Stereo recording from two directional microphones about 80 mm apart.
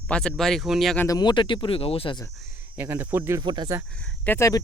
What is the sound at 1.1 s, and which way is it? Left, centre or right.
Speech, left.